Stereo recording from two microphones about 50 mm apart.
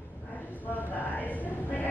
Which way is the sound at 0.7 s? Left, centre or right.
Left.